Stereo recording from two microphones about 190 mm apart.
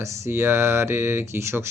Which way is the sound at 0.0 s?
15° right (ahead or behind).